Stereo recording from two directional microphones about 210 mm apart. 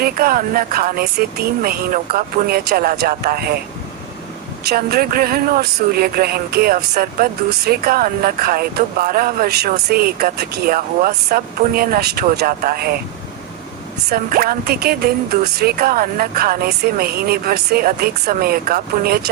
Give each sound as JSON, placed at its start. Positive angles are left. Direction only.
{"t": 0.0, "sound": "speech", "side_deg": -45}
{"t": 4.6, "sound": "speech", "side_deg": -45}
{"t": 14.1, "sound": "speech", "side_deg": -45}